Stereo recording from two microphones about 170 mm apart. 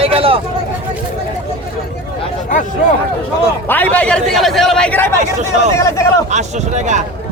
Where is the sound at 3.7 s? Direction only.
10° left (ahead or behind).